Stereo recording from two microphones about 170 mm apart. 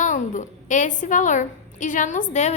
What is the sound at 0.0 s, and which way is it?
A woman's voice, 50° left (ahead or behind).